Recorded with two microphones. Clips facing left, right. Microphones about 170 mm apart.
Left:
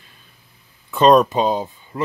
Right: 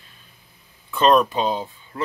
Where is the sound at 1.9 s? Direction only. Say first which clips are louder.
Left 3 dB; 25° left (ahead or behind).